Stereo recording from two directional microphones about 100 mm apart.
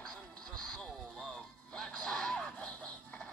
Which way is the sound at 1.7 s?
5° left (ahead or behind).